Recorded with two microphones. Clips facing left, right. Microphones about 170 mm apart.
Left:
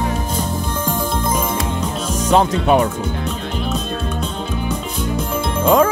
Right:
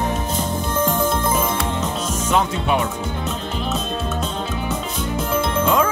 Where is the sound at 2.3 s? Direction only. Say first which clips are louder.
Left 6 dB; 40° left (ahead or behind).